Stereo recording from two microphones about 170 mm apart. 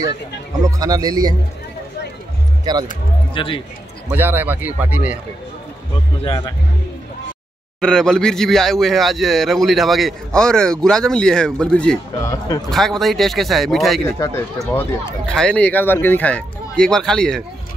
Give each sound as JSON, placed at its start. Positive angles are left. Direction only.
{"t": 0.7, "sound": "speech", "side_deg": -20}
{"t": 3.3, "sound": "speech", "side_deg": 30}
{"t": 4.1, "sound": "speech", "side_deg": -10}
{"t": 6.2, "sound": "speech", "side_deg": 25}
{"t": 7.8, "sound": "a man's voice", "side_deg": 5}
{"t": 14.0, "sound": "speech", "side_deg": 15}